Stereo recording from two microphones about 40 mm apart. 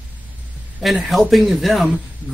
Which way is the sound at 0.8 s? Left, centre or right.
Centre.